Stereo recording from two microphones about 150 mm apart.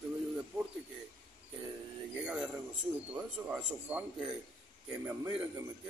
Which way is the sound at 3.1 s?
5° right (ahead or behind).